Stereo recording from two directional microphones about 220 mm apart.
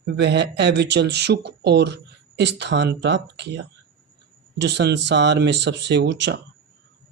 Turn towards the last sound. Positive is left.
turn(degrees=-50)  # may be behind; listen again after turning